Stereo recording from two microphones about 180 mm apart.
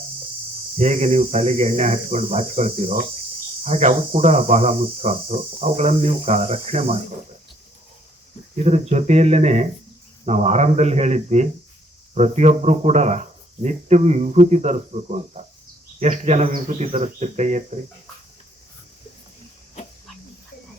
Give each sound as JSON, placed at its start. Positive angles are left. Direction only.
{"t": 0.8, "sound": "speech", "side_deg": -40}
{"t": 8.5, "sound": "speech", "side_deg": -40}